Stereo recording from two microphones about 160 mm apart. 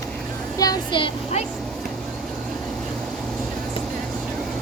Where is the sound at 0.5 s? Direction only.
25° left (ahead or behind).